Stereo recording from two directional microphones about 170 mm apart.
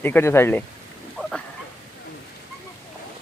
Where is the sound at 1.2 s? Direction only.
5° right (ahead or behind).